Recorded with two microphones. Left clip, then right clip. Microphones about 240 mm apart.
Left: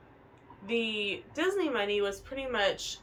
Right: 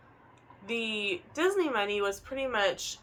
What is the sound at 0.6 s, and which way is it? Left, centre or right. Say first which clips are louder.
Speech: left 1 dB; centre.